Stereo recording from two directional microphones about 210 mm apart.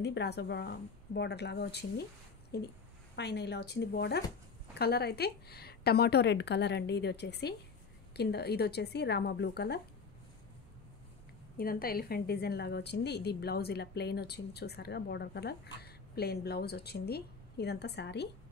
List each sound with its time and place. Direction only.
0.0 s a woman's voice: 55° left (ahead or behind)
11.5 s a woman's voice: 45° left (ahead or behind)